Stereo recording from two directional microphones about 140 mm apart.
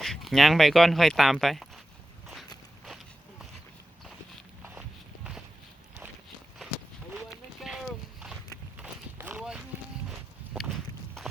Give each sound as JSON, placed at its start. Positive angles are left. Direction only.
{"t": 0.0, "sound": "speech", "side_deg": 0}
{"t": 2.2, "sound": "walk", "side_deg": 0}
{"t": 7.1, "sound": "run", "side_deg": -5}
{"t": 8.8, "sound": "run", "side_deg": -15}
{"t": 10.1, "sound": "walk", "side_deg": 0}